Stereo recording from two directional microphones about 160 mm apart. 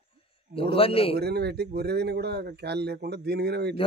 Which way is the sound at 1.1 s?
90° right.